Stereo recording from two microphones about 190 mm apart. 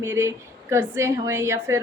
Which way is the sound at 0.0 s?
15° right (ahead or behind).